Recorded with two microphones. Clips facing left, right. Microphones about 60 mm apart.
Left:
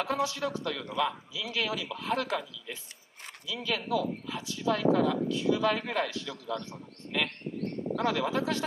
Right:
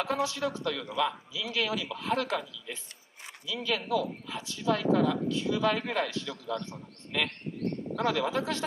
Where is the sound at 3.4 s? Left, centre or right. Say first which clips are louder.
Right 1 dB; centre.